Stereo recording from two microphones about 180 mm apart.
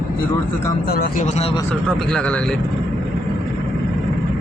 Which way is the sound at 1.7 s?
5° left (ahead or behind).